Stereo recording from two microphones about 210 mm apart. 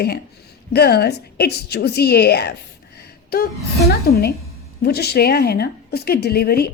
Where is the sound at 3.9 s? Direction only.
50° left (ahead or behind).